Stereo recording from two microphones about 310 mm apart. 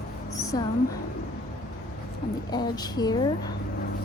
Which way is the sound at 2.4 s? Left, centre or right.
Centre.